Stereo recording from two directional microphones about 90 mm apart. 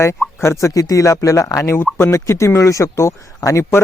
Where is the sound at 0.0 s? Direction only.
30° left (ahead or behind).